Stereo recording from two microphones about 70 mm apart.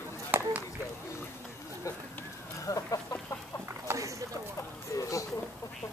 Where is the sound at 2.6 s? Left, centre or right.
Left.